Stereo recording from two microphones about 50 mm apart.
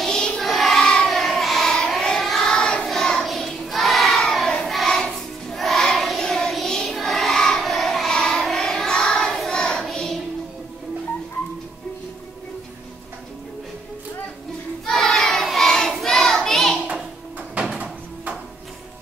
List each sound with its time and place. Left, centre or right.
0.0 s choir: centre
0.4 s choir: centre
0.8 s child singing: centre
1.1 s child singing: centre
5.1 s music: centre
6.2 s child singing: centre
9.8 s child singing: centre
14.9 s child singing: centre